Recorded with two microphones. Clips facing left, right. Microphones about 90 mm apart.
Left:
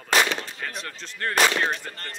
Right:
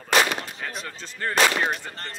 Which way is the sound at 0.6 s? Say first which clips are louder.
Even; 5° right (ahead or behind).